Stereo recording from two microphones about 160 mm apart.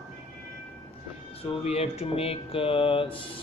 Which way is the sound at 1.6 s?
40° left (ahead or behind).